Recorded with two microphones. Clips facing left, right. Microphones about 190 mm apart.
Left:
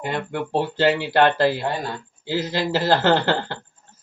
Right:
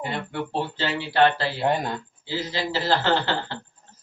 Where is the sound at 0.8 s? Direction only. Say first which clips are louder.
Left 3 dB; 50° left (ahead or behind).